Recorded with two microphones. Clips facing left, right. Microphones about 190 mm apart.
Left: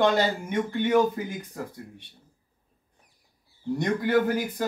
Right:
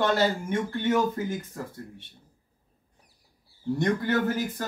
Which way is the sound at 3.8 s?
15° left (ahead or behind).